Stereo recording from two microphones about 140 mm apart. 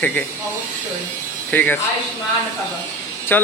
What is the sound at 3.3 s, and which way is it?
Speech, 15° left (ahead or behind).